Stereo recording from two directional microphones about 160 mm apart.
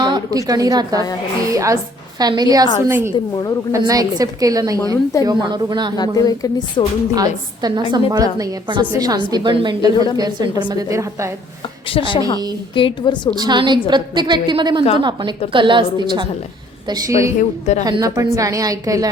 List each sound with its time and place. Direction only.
0.0 s a woman's voice: 25° right (ahead or behind)
6.0 s speech: 20° left (ahead or behind)
7.1 s a woman's voice: 25° right (ahead or behind)
11.9 s a woman's voice: 35° left (ahead or behind)
13.3 s a woman's voice: 25° right (ahead or behind)